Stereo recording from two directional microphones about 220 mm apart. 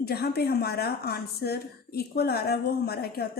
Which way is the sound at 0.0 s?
45° left (ahead or behind).